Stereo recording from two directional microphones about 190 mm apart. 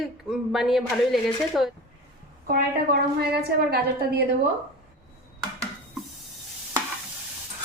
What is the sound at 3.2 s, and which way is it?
A woman's voice, 55° right (ahead or behind).